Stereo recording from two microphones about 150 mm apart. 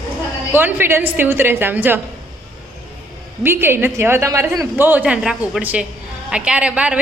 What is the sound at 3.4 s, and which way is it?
A woman's voice, 15° right (ahead or behind).